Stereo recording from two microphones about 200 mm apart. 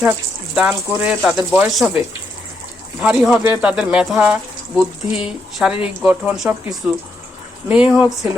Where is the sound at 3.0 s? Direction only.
5° right (ahead or behind).